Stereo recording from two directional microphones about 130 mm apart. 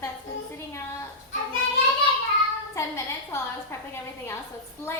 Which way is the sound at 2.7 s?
20° left (ahead or behind).